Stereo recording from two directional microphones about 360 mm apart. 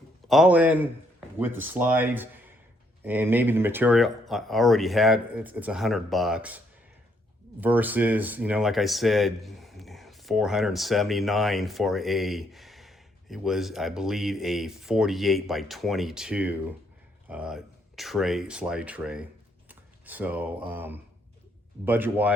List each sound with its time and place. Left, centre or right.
0.3 s speech: centre
7.6 s speech: centre